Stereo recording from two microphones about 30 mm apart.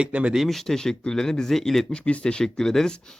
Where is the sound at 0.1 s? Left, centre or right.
Right.